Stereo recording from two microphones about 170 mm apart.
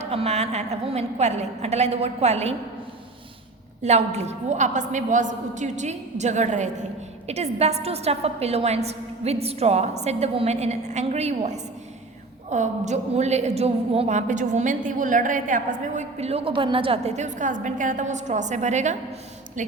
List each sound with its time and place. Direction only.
0.0 s a woman's voice: 35° right (ahead or behind)
3.8 s a woman's voice: 40° right (ahead or behind)